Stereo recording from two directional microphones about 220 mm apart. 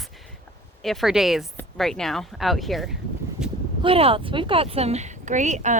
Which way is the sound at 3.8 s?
25° right (ahead or behind).